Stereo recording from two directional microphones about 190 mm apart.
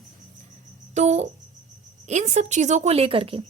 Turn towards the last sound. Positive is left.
turn(degrees=-30)  # may be behind; listen again after turning